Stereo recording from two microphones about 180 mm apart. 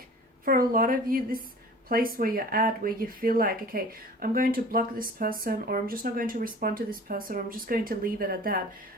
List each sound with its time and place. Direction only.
0.7 s speech: 55° right (ahead or behind)